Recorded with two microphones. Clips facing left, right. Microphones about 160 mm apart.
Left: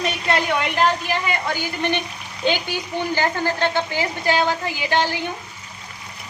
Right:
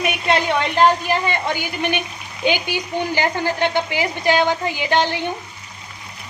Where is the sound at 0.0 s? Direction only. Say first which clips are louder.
Right 2 dB; 15° right (ahead or behind).